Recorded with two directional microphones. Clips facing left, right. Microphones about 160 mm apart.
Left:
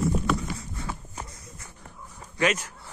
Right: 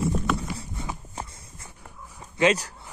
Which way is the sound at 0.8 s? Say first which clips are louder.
Right 2 dB; 25° right (ahead or behind).